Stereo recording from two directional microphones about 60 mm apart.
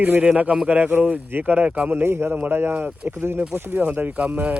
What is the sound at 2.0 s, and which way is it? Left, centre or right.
Speech, right.